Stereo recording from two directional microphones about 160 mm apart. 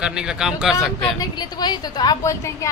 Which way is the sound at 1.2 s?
25° left (ahead or behind).